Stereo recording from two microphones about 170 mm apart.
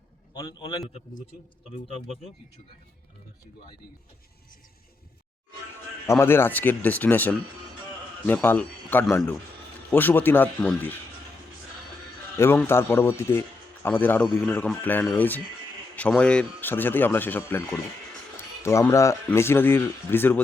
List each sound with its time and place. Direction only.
0.3 s a man's voice: 25° left (ahead or behind)
6.1 s a man's voice: 15° left (ahead or behind)
12.6 s a man's voice: 15° left (ahead or behind)